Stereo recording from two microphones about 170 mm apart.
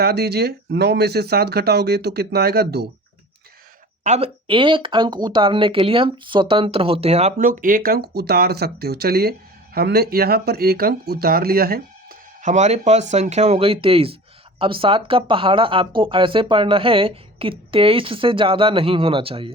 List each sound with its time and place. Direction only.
0.0 s speech: 70° right (ahead or behind)
4.0 s speech: 40° right (ahead or behind)